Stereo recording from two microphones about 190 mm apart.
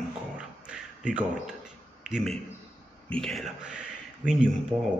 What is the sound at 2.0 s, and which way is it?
A man's voice, centre (ahead or behind).